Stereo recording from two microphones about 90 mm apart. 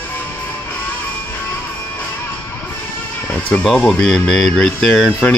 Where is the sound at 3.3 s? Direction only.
20° left (ahead or behind).